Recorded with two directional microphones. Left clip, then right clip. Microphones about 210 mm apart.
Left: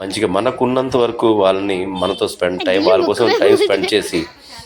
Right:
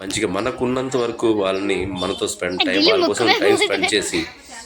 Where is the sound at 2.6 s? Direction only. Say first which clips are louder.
Left 2 dB; 20° left (ahead or behind).